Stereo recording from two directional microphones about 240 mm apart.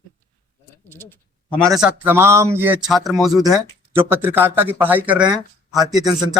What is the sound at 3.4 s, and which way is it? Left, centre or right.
Speech, centre.